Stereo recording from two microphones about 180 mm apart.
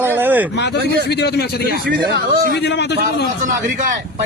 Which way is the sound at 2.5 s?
70° left (ahead or behind).